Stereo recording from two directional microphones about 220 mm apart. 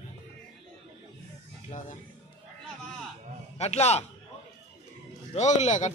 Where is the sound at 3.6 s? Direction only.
30° left (ahead or behind).